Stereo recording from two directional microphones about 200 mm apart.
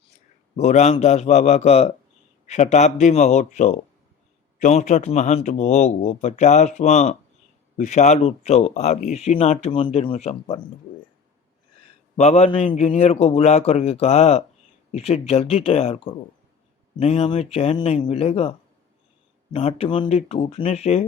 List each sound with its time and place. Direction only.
0.5 s speech: 35° left (ahead or behind)
12.1 s speech: 30° left (ahead or behind)
19.5 s speech: 30° left (ahead or behind)